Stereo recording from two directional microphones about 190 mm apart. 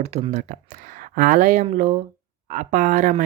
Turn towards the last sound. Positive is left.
turn(degrees=-40)  # may be behind; listen again after turning